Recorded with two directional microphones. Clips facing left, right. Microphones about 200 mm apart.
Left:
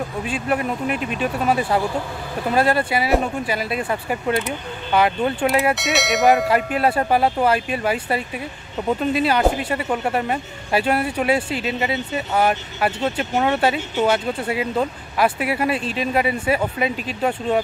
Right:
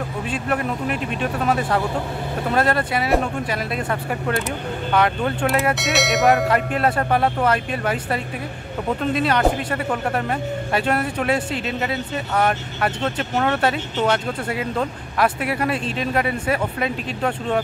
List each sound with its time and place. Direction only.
0.3 s speech: 5° left (ahead or behind)